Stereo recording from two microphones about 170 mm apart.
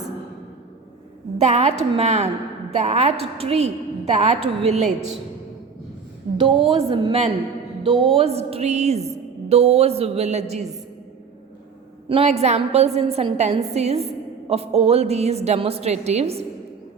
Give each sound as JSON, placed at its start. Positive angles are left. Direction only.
{"t": 1.4, "sound": "a woman's voice", "side_deg": -40}
{"t": 6.3, "sound": "a sound", "side_deg": -35}
{"t": 6.7, "sound": "a woman's voice", "side_deg": -30}
{"t": 12.0, "sound": "a woman's voice", "side_deg": -35}